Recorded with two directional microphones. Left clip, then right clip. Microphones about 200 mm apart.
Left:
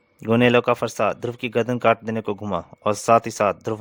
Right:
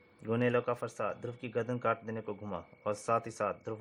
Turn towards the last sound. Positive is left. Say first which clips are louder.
# left 14 dB
turn(degrees=50)  # may be behind; listen again after turning